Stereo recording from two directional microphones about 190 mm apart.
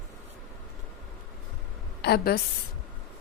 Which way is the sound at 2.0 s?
55° left (ahead or behind).